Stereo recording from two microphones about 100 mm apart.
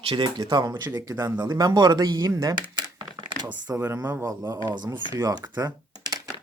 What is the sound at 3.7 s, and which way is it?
Speech, 25° right (ahead or behind).